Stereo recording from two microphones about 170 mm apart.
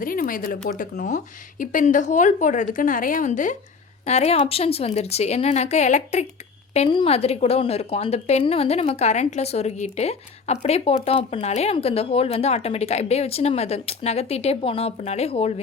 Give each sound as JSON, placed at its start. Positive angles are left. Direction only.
{"t": 0.0, "sound": "a woman's voice", "side_deg": 55}